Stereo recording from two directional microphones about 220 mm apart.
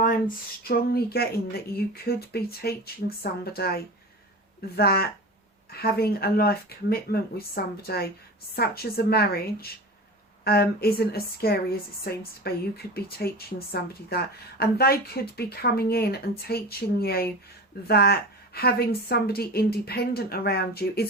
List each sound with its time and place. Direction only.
0.6 s a woman's voice: 45° left (ahead or behind)